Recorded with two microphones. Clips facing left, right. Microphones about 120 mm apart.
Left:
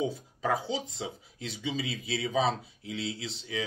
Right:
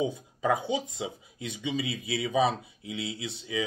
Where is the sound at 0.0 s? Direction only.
20° right (ahead or behind).